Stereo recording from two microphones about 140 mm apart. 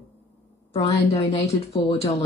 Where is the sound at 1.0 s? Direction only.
50° left (ahead or behind).